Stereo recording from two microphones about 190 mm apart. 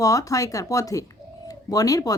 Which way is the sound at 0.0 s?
15° left (ahead or behind).